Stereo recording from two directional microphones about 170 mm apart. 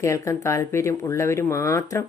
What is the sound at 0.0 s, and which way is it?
Speech, 15° left (ahead or behind).